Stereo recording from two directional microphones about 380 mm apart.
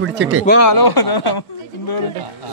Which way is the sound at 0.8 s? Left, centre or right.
Left.